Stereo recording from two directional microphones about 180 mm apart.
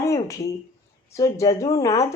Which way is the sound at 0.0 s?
20° left (ahead or behind).